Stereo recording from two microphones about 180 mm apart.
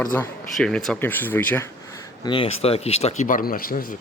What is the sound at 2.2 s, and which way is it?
Speech, 30° left (ahead or behind).